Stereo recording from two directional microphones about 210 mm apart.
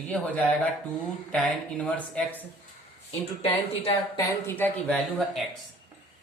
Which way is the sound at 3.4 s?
25° left (ahead or behind).